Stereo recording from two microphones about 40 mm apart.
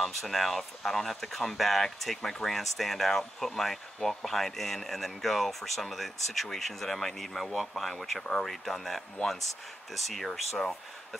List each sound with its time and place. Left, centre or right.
0.0 s speech: centre